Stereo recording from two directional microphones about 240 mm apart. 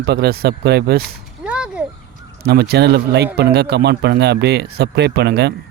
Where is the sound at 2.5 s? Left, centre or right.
Right.